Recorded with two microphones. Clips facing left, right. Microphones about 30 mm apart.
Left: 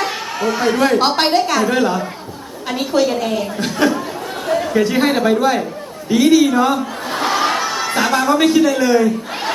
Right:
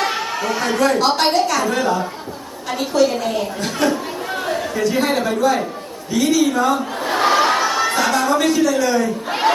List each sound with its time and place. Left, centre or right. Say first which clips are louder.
0.3 s speech: left 8 dB; centre
0.8 s a woman's voice: even; left
3.6 s speech: left 3 dB; centre
4.7 s a woman's voice: left 3 dB; left
7.1 s crowd: right 2 dB; centre
7.9 s a woman's voice: left 7 dB; left